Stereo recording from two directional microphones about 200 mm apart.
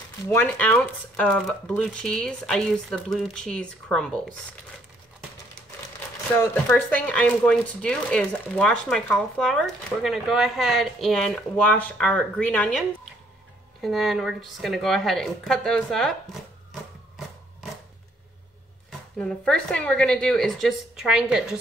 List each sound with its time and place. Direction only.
0.3 s speech: 10° left (ahead or behind)
6.3 s speech: 10° left (ahead or behind)
18.9 s speech: 5° left (ahead or behind)